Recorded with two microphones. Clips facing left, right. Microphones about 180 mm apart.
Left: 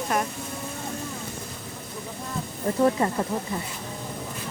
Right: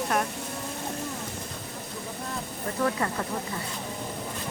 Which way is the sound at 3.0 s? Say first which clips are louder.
Left 5 dB; 20° left (ahead or behind).